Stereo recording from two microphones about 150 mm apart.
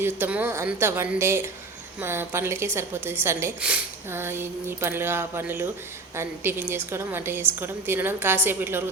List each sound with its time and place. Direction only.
0.0 s a woman's voice: 15° right (ahead or behind)